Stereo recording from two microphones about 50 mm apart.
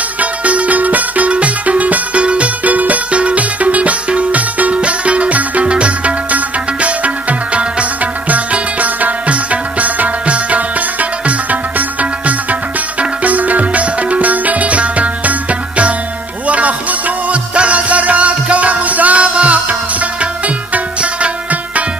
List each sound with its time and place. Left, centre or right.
0.2 s music: right
16.4 s music: right